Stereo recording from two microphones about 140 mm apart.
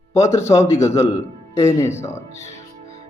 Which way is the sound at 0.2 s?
20° left (ahead or behind).